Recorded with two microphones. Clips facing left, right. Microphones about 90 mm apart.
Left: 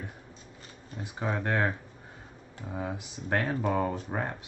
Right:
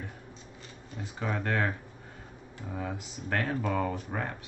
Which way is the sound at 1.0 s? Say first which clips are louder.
Left 1 dB; 20° left (ahead or behind).